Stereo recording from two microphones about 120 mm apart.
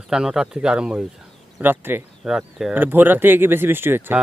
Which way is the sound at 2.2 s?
5° right (ahead or behind).